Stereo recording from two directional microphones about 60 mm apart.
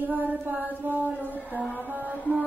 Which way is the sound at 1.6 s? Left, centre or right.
Centre.